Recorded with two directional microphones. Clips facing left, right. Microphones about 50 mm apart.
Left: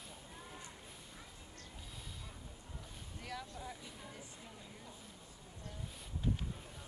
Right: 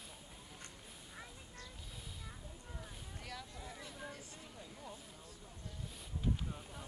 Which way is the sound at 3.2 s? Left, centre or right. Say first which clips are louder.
Left 4 dB; centre.